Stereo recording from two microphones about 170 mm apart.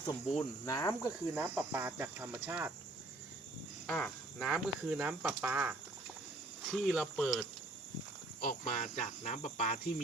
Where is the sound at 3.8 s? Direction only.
5° left (ahead or behind).